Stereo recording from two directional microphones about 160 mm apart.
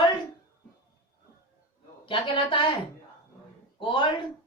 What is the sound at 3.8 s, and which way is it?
Speech, 30° left (ahead or behind).